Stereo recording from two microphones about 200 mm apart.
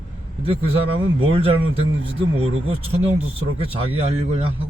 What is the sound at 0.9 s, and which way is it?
Speech, 25° right (ahead or behind).